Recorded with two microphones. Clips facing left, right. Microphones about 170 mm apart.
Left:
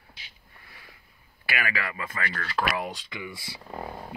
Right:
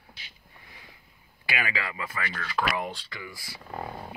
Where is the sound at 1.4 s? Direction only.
20° right (ahead or behind).